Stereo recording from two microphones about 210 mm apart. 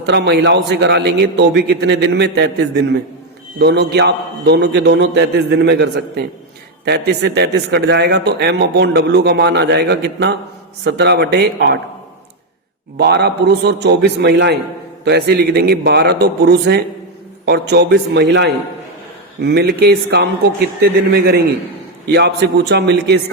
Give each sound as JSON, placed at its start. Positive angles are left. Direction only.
{"t": 0.0, "sound": "a man's voice", "side_deg": -55}
{"t": 13.0, "sound": "a man's voice", "side_deg": -50}